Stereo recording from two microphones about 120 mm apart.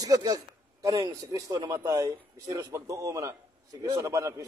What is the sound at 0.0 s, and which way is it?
A man's voice, 35° right (ahead or behind).